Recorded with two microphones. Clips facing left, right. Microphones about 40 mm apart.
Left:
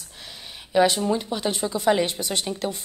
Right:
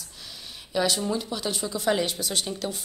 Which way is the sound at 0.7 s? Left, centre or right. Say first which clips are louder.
Left 6 dB; left.